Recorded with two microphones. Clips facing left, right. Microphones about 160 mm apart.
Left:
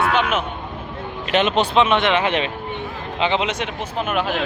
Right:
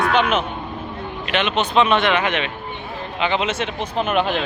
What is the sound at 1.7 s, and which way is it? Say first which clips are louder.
Speech: right 2 dB; 20° left (ahead or behind).